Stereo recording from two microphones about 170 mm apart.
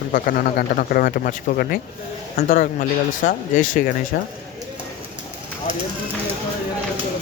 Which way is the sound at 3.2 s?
50° left (ahead or behind).